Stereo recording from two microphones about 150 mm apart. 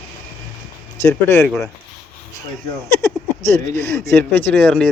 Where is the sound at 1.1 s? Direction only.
15° left (ahead or behind).